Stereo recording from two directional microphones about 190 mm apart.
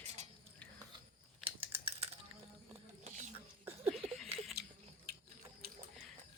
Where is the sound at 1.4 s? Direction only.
30° right (ahead or behind).